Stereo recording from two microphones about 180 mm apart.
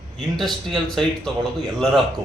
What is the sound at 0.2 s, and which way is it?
A man's voice, centre (ahead or behind).